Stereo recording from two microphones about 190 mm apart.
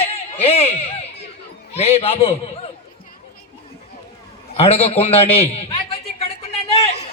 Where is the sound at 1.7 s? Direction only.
35° left (ahead or behind).